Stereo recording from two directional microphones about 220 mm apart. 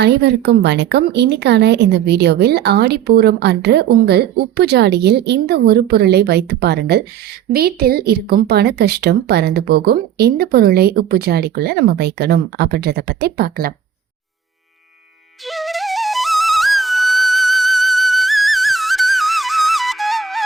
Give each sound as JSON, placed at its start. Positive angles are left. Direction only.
{"t": 0.0, "sound": "a woman's voice", "side_deg": -50}
{"t": 15.4, "sound": "flute", "side_deg": 0}